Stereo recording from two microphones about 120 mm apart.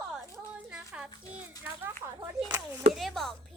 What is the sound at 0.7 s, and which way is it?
Music, 5° right (ahead or behind).